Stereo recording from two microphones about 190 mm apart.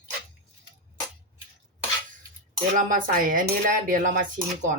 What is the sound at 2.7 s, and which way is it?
Speech, 45° right (ahead or behind).